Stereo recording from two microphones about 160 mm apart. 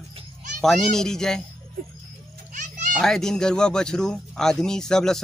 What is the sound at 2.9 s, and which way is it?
Speech, 5° left (ahead or behind).